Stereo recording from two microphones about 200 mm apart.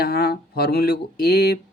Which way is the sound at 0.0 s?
50° left (ahead or behind).